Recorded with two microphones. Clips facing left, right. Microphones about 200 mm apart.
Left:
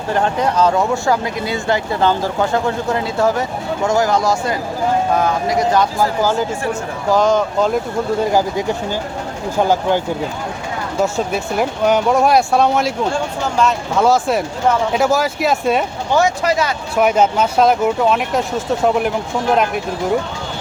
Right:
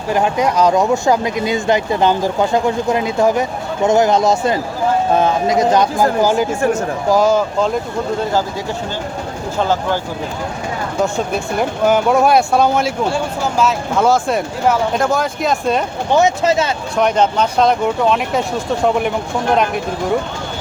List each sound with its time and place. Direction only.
0.1 s speech: 10° right (ahead or behind)
7.1 s speech: 5° right (ahead or behind)
8.2 s speech: 15° left (ahead or behind)
11.0 s speech: centre (ahead or behind)
16.1 s speech: 25° right (ahead or behind)
17.0 s speech: 5° left (ahead or behind)